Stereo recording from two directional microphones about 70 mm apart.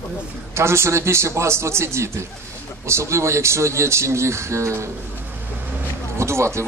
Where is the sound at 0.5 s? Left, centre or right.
Right.